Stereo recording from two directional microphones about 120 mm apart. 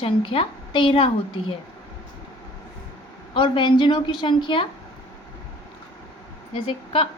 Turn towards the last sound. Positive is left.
turn(degrees=50)  # may be behind; listen again after turning